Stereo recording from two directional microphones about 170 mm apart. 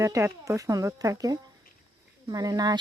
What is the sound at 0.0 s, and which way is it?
Speech, 15° right (ahead or behind).